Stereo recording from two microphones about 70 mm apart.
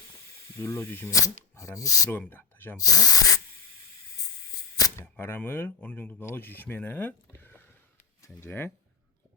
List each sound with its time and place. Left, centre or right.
0.6 s speech: left
1.1 s speech: left
2.0 s speech: left
2.7 s speech: left
5.1 s speech: left